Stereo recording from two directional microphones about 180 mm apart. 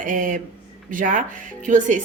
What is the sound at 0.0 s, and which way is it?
Speech, 45° right (ahead or behind).